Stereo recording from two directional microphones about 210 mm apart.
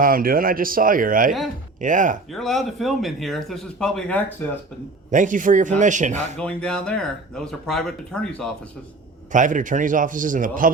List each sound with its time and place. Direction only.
0.0 s a man's voice: 45° right (ahead or behind)
2.3 s speech: centre (ahead or behind)
5.1 s a man's voice: 40° right (ahead or behind)
6.3 s speech: 5° left (ahead or behind)
9.3 s a man's voice: 40° right (ahead or behind)